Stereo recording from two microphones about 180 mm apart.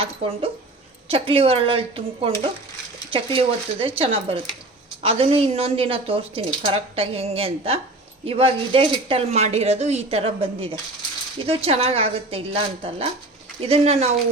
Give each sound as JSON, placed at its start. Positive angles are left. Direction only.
{"t": 0.0, "sound": "speech", "side_deg": -30}
{"t": 3.1, "sound": "speech", "side_deg": -30}